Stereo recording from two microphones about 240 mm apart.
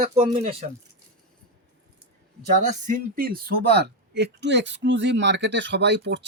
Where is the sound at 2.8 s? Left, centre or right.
Right.